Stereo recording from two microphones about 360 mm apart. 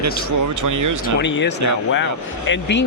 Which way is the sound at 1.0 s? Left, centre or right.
Left.